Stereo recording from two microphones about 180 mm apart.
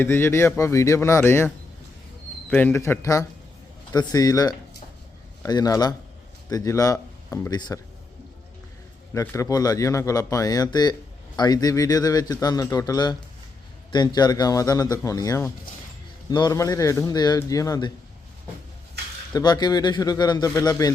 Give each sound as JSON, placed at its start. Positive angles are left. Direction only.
{"t": 0.0, "sound": "speech", "side_deg": 15}
{"t": 2.5, "sound": "a man's voice", "side_deg": 10}
{"t": 9.1, "sound": "a man's voice", "side_deg": 15}
{"t": 19.3, "sound": "a man's voice", "side_deg": 20}